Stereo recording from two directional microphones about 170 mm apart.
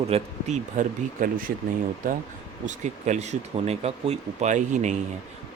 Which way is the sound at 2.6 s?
45° right (ahead or behind).